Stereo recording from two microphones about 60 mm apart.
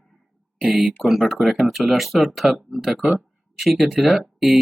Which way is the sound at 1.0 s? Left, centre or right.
Centre.